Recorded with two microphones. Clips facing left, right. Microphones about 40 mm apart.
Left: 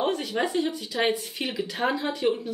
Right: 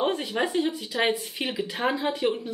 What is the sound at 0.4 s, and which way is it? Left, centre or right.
Speech, centre.